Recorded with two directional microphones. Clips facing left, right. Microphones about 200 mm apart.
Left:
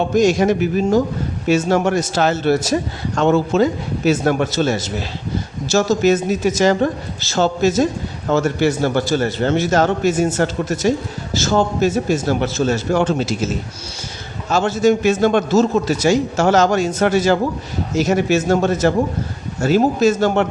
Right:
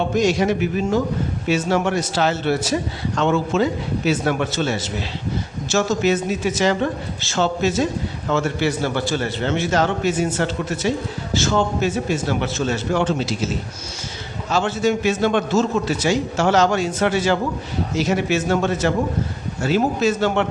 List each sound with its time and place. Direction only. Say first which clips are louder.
0.1 s a man's voice: left 5 dB; 45° left (ahead or behind)
14.5 s a man's voice: left 4 dB; 45° left (ahead or behind)